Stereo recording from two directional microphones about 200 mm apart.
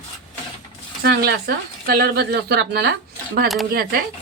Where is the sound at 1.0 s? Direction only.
50° right (ahead or behind).